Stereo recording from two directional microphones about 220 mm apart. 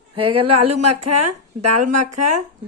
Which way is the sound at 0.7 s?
90° right.